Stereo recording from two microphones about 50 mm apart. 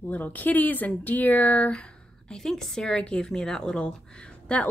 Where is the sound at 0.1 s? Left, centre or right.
Left.